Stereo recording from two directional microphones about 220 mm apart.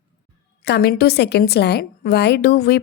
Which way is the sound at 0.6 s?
50° left (ahead or behind).